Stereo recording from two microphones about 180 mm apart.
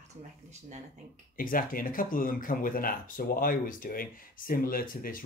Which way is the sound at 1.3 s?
50° left (ahead or behind).